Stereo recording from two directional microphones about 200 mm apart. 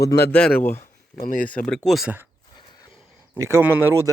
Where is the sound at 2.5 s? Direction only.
20° left (ahead or behind).